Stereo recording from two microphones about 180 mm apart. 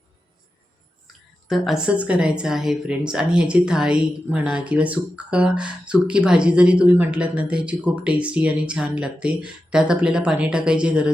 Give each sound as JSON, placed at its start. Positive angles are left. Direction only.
{"t": 1.0, "sound": "speech", "side_deg": 0}